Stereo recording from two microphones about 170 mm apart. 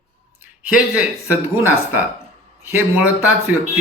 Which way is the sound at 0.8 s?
5° right (ahead or behind).